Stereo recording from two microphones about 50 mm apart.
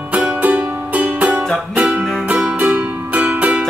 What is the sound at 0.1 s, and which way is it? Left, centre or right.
Music, right.